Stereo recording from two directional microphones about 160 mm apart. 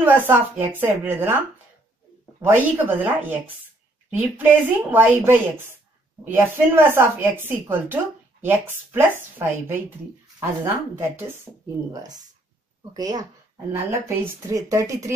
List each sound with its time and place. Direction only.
0.0 s speech: 10° right (ahead or behind)
2.4 s a woman's voice: 10° right (ahead or behind)